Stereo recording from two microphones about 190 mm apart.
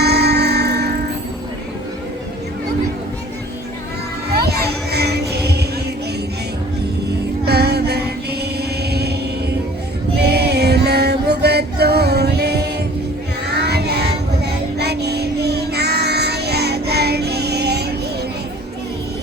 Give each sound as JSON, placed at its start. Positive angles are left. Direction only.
{"t": 0.0, "sound": "music", "side_deg": -60}
{"t": 4.3, "sound": "music", "side_deg": -60}
{"t": 7.4, "sound": "music", "side_deg": -60}
{"t": 10.2, "sound": "female singing", "side_deg": -60}
{"t": 13.5, "sound": "child singing", "side_deg": -60}